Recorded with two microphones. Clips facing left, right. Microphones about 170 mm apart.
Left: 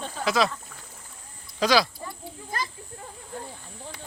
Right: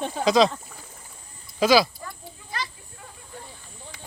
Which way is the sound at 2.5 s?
45° left (ahead or behind).